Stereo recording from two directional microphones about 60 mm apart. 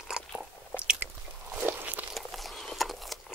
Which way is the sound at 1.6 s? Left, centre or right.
Right.